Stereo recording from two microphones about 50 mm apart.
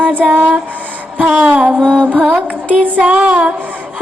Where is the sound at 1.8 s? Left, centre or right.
Right.